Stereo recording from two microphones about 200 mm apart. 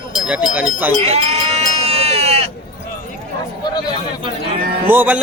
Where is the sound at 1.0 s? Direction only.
30° right (ahead or behind).